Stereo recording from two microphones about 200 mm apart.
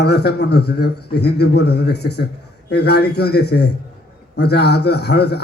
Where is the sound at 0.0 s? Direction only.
55° left (ahead or behind).